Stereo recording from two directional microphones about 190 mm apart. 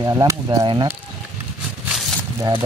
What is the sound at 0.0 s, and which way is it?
Speech, 20° right (ahead or behind).